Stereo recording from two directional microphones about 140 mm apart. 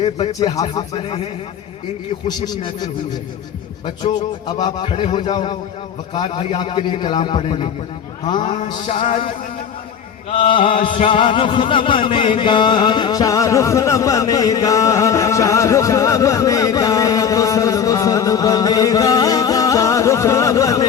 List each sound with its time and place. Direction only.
0.3 s a man's voice: 30° left (ahead or behind)
2.2 s a man's voice: 30° left (ahead or behind)
10.2 s a man's voice: 40° left (ahead or behind)
10.8 s music: 60° left (ahead or behind)
11.1 s music: 40° left (ahead or behind)